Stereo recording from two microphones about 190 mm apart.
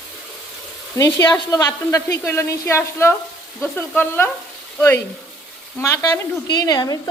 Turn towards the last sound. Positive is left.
turn(degrees=20)  # may be behind; listen again after turning